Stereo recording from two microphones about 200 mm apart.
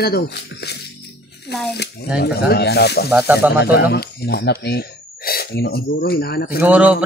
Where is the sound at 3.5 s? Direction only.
55° left (ahead or behind).